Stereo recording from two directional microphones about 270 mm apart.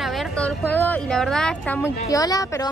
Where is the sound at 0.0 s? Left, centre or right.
Centre.